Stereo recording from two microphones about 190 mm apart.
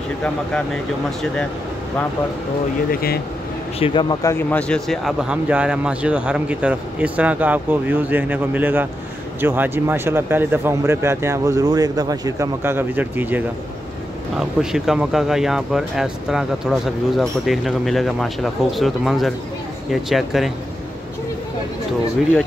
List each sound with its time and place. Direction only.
2.9 s speech: 55° left (ahead or behind)
3.8 s speech: 25° left (ahead or behind); by 13.4 s 10° right (ahead or behind)
14.6 s speech: 5° right (ahead or behind)